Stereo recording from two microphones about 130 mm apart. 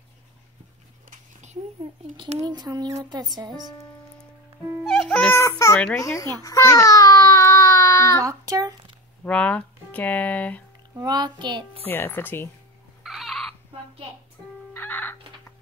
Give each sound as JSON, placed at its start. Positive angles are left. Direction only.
{"t": 1.1, "sound": "a sound", "side_deg": -65}
{"t": 2.1, "sound": "child singing", "side_deg": -30}
{"t": 4.8, "sound": "music", "side_deg": 0}
{"t": 5.4, "sound": "a sound", "side_deg": 20}
{"t": 5.9, "sound": "speech", "side_deg": 25}
{"t": 6.4, "sound": "baby cry", "side_deg": 25}
{"t": 8.2, "sound": "a sound", "side_deg": -25}
{"t": 9.2, "sound": "speech", "side_deg": 10}
{"t": 11.0, "sound": "child singing", "side_deg": -35}
{"t": 11.8, "sound": "speech", "side_deg": 15}
{"t": 13.0, "sound": "a sound", "side_deg": 0}
{"t": 14.7, "sound": "crow", "side_deg": 15}